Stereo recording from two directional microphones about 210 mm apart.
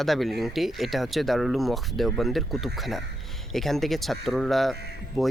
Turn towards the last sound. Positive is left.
turn(degrees=0)  # may be behind; listen again after turning